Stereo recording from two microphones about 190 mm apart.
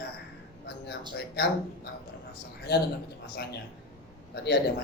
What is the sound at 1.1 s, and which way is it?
Speech, 60° left (ahead or behind).